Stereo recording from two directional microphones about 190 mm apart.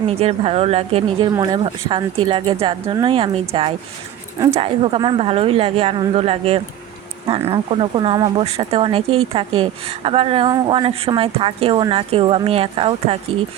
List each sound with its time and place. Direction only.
0.1 s a woman's voice: 30° right (ahead or behind)